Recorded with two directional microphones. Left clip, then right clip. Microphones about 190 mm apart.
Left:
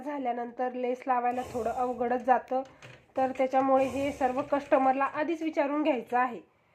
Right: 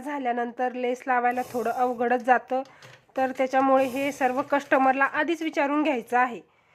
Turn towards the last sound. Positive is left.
turn(degrees=-20)  # may be behind; listen again after turning